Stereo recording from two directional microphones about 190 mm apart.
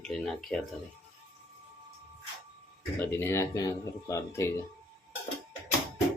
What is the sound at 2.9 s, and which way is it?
Speech, 10° left (ahead or behind).